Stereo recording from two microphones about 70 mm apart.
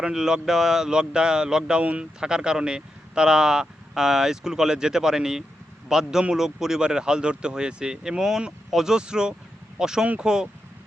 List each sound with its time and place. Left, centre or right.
0.0 s speech: centre